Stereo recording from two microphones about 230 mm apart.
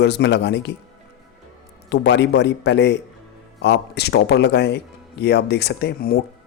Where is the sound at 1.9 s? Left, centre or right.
Left.